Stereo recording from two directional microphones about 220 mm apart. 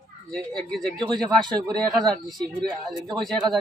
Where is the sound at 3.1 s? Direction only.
Centre (ahead or behind).